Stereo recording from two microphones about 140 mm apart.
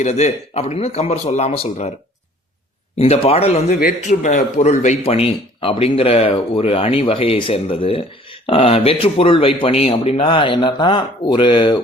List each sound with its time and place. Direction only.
0.0 s speech: 55° left (ahead or behind)
3.0 s speech: 45° left (ahead or behind)
3.7 s speech: 80° left; by 4.9 s 55° left (ahead or behind)
5.0 s speech: 45° left (ahead or behind)